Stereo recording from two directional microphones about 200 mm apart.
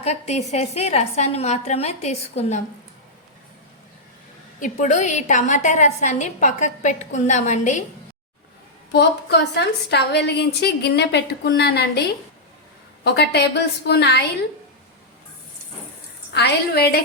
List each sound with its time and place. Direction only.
0.0 s a woman's voice: 35° left (ahead or behind)
4.6 s a woman's voice: 40° left (ahead or behind)
8.9 s a woman's voice: 55° left (ahead or behind)
13.1 s a woman's voice: 55° left (ahead or behind)
16.3 s a woman's voice: 55° left (ahead or behind)